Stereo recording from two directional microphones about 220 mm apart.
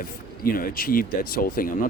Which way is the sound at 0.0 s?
40° left (ahead or behind).